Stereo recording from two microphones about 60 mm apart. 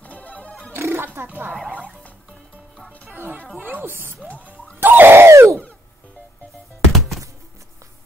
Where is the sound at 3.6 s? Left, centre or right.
Right.